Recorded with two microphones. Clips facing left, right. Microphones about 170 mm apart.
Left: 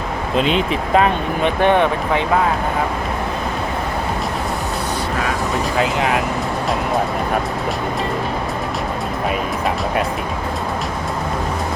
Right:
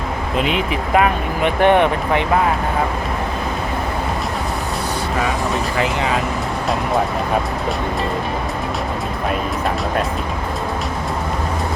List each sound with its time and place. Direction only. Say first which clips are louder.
0.7 s speech: left 1 dB; 30° left (ahead or behind)
1.5 s speech: right 2 dB; 15° right (ahead or behind)
5.8 s speech: left 2 dB; 80° left